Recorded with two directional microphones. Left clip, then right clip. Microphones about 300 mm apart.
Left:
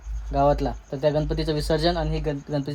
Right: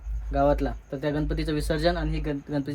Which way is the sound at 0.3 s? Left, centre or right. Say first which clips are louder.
Left 2 dB; left.